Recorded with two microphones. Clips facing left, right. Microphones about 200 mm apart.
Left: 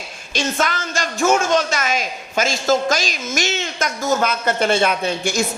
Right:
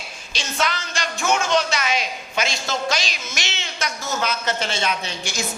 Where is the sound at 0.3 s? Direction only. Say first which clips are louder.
Left 5 dB; 50° left (ahead or behind).